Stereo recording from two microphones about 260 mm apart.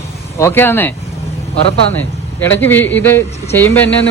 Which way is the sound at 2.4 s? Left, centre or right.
Centre.